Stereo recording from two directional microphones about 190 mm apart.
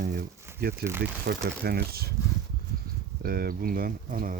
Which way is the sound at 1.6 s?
55° right (ahead or behind).